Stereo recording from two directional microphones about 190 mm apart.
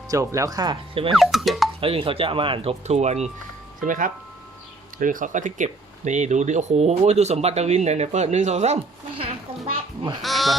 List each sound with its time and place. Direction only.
0.1 s speech: 15° right (ahead or behind)
1.1 s speech: centre (ahead or behind)
1.8 s speech: 30° right (ahead or behind)
10.2 s speech: centre (ahead or behind)